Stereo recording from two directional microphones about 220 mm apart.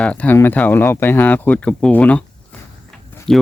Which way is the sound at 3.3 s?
Centre (ahead or behind).